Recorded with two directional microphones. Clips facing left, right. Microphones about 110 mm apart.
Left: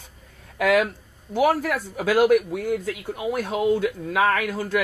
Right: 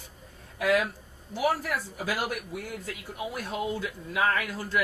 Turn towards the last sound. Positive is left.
turn(degrees=75)  # may be behind; listen again after turning